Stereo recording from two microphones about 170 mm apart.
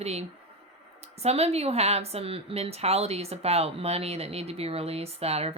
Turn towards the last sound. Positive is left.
turn(degrees=-35)  # may be behind; listen again after turning